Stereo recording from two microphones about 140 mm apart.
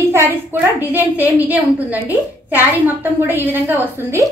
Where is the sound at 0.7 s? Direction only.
15° right (ahead or behind).